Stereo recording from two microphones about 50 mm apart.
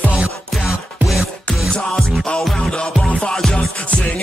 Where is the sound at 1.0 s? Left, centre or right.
Centre.